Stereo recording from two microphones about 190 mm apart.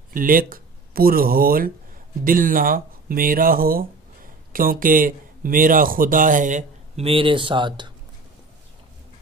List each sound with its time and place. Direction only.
0.1 s speech: 45° right (ahead or behind); by 7.9 s 25° right (ahead or behind)